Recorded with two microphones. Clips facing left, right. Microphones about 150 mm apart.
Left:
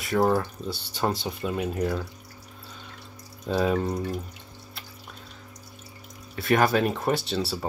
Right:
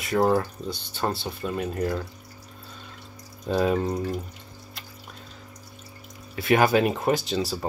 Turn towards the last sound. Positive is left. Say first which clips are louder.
# right 1 dB
turn(degrees=5)  # may be behind; listen again after turning